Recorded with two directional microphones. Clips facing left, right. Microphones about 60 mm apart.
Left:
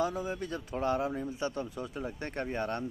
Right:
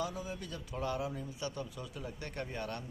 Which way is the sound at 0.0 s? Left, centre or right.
Left.